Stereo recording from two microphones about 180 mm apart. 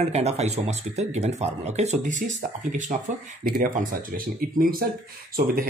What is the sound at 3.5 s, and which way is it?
Speech, 50° right (ahead or behind).